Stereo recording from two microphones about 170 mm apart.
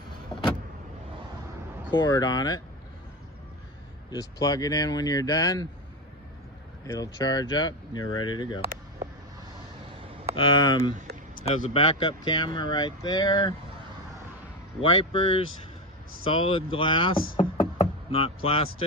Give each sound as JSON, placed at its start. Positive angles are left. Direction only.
{"t": 1.9, "sound": "speech", "side_deg": 25}
{"t": 4.1, "sound": "speech", "side_deg": 20}
{"t": 6.9, "sound": "speech", "side_deg": 20}
{"t": 10.3, "sound": "speech", "side_deg": 25}
{"t": 11.4, "sound": "speech", "side_deg": 40}
{"t": 14.8, "sound": "speech", "side_deg": 30}